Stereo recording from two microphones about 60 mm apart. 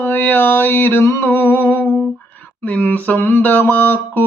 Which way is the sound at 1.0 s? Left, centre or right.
Left.